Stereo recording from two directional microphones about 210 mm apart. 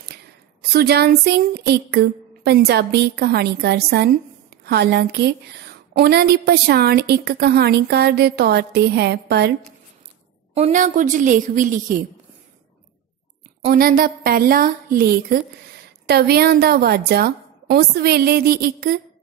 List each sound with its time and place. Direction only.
0.6 s speech: 50° right (ahead or behind)
10.5 s a woman's voice: 35° right (ahead or behind)
13.7 s speech: 45° right (ahead or behind)